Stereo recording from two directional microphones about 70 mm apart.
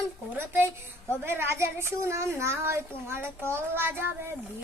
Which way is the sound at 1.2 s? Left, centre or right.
Right.